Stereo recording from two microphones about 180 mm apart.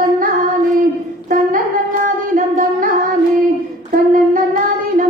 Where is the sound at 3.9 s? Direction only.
45° right (ahead or behind).